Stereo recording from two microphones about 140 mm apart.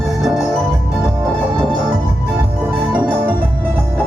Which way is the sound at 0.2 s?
Centre (ahead or behind).